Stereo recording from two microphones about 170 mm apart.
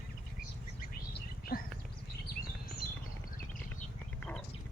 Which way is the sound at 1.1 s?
60° left (ahead or behind).